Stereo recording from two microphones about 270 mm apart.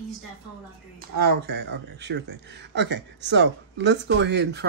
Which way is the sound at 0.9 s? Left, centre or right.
Right.